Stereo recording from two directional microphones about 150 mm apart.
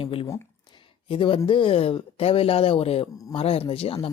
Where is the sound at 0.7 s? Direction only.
35° left (ahead or behind).